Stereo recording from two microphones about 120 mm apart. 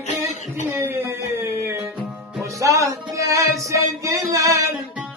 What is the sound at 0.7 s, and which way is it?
Music, 20° right (ahead or behind).